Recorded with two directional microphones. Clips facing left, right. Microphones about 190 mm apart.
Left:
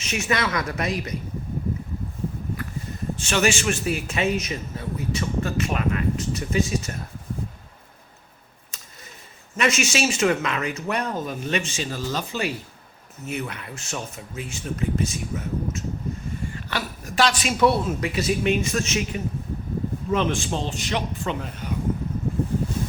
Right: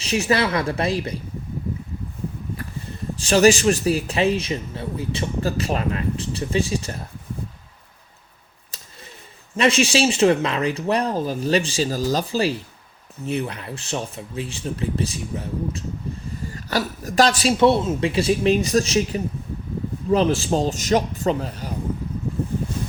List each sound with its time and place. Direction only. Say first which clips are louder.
0.0 s a man's voice: right 5 dB; 35° right (ahead or behind)
3.2 s a man's voice: right 8 dB; 35° right (ahead or behind)
9.6 s a man's voice: right 5 dB; 30° right (ahead or behind)
16.4 s a sound: right 9 dB; 40° right (ahead or behind)
17.6 s a man's voice: right 2 dB; 25° right (ahead or behind)